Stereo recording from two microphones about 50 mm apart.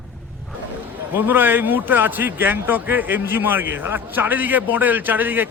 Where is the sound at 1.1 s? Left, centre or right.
Right.